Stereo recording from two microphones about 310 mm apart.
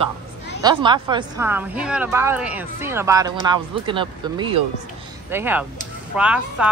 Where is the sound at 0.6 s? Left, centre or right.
Centre.